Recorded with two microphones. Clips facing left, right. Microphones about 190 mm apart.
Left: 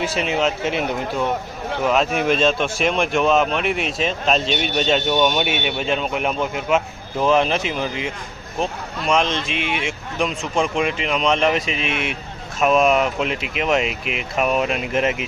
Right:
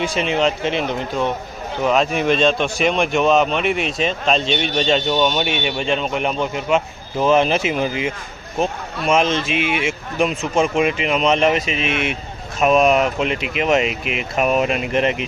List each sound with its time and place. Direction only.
0.0 s speech: 5° left (ahead or behind)